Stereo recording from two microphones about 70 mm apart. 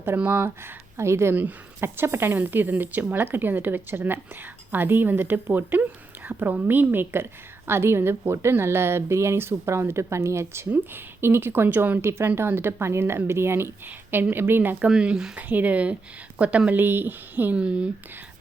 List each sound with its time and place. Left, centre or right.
0.2 s speech: right
1.4 s speech: right
14.8 s speech: centre
15.4 s speech: right
16.7 s speech: right
17.6 s speech: centre